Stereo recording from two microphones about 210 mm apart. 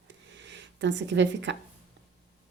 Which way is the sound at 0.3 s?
55° right (ahead or behind).